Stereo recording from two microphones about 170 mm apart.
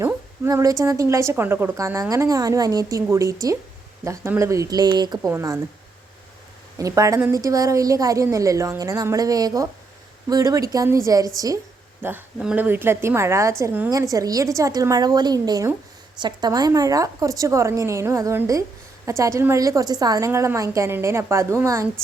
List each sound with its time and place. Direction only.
0.0 s a woman's voice: 20° right (ahead or behind)
6.7 s a woman's voice: 20° right (ahead or behind)
12.0 s a woman's voice: 10° right (ahead or behind)